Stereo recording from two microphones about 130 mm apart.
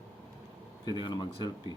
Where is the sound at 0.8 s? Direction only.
35° left (ahead or behind).